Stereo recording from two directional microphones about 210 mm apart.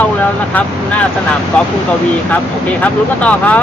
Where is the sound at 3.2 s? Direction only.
5° left (ahead or behind).